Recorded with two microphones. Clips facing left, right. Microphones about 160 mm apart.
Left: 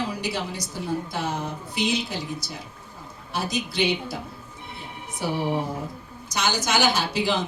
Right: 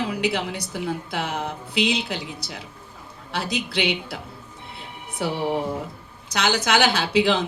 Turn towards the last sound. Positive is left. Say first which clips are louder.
# right 3 dB
turn(degrees=-65)  # may be behind; listen again after turning